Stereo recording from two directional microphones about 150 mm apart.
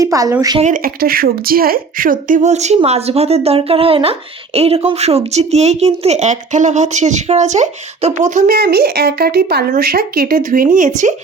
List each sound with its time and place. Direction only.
0.0 s speech: 20° right (ahead or behind)
0.6 s speech: 70° right (ahead or behind)